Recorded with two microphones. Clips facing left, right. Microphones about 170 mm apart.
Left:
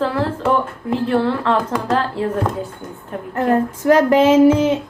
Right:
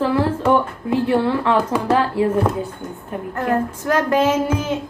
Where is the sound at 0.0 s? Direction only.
Centre (ahead or behind).